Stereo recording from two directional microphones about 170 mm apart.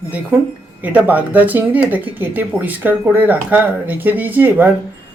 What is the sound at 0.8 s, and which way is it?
Speech, 10° right (ahead or behind).